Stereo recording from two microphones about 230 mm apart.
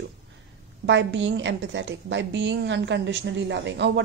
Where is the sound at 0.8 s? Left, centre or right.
Right.